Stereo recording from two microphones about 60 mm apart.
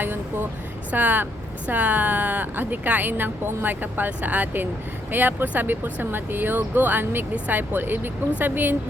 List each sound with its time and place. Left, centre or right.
0.0 s vehicle: right
0.9 s speech: right